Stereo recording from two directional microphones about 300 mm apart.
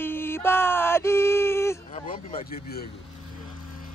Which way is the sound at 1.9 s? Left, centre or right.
Centre.